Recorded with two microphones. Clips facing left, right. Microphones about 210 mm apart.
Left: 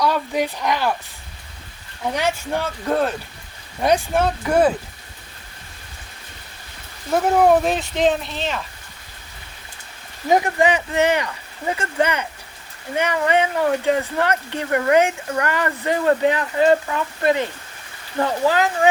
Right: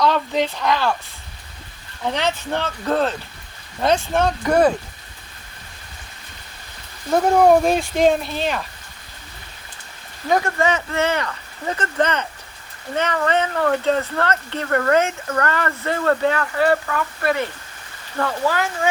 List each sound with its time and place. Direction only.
0.0 s speech: 10° left (ahead or behind)
2.1 s speech: 10° left (ahead or behind)
7.1 s speech: 5° left (ahead or behind)
10.2 s speech: 20° left (ahead or behind)